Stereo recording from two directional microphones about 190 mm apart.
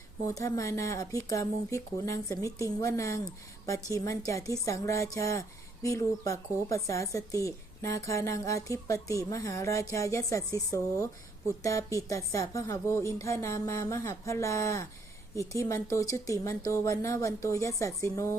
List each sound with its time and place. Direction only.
0.3 s speech: 15° left (ahead or behind)